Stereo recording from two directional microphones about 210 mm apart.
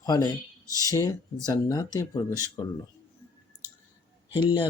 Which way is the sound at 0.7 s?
15° right (ahead or behind).